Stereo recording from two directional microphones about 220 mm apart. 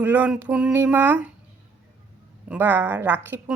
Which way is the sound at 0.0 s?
5° right (ahead or behind).